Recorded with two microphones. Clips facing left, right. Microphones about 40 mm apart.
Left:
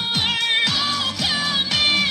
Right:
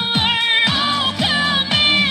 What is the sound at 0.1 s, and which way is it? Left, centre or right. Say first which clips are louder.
Music: right 4 dB; right.